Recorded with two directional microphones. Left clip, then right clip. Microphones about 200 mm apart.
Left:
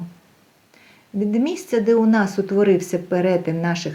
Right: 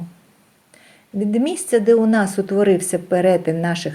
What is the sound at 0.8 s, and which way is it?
Speech, 25° right (ahead or behind).